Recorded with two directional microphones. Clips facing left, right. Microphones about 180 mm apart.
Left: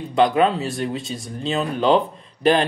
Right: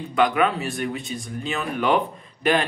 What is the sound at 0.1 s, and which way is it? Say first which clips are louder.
Speech: left 3 dB; 30° left (ahead or behind).